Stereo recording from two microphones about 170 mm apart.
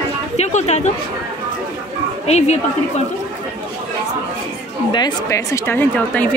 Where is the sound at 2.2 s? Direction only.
40° left (ahead or behind).